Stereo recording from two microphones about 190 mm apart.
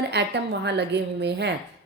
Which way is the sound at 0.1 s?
65° right (ahead or behind).